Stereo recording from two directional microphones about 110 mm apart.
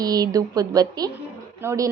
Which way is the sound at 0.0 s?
35° right (ahead or behind).